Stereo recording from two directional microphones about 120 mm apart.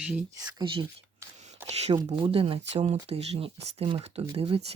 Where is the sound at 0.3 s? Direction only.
30° right (ahead or behind).